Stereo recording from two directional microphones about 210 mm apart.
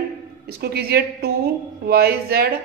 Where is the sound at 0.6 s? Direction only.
50° right (ahead or behind).